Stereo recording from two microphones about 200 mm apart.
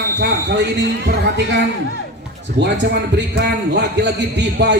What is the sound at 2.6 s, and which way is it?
A man's voice, 60° right (ahead or behind).